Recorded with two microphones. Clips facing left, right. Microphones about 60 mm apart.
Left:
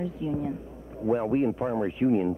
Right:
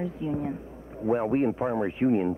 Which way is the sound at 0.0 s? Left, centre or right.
Right.